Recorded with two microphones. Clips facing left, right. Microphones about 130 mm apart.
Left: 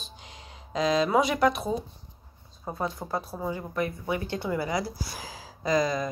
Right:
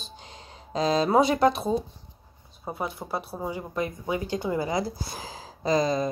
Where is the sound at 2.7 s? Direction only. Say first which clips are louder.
Even; 15° right (ahead or behind).